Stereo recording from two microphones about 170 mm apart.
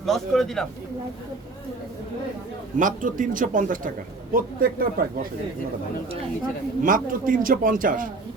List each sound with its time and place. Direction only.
0.0 s a man's voice: centre (ahead or behind)
2.7 s a man's voice: 50° right (ahead or behind)
6.8 s a man's voice: 55° right (ahead or behind)